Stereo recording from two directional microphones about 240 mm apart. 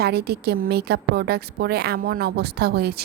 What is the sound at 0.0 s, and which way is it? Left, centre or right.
Speech, right.